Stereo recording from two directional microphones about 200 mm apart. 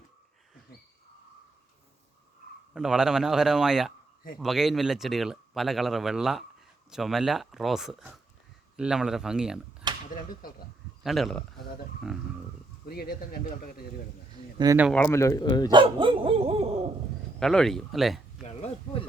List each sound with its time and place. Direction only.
2.7 s speech: 5° right (ahead or behind)
9.8 s a sound: 20° right (ahead or behind)
11.0 s speech: centre (ahead or behind)
12.8 s speech: 50° left (ahead or behind)
14.6 s speech: 15° right (ahead or behind)
14.8 s speech: 5° left (ahead or behind)
15.7 s dog: 25° right (ahead or behind)
17.4 s speech: 5° left (ahead or behind)
18.3 s a sound: 35° left (ahead or behind)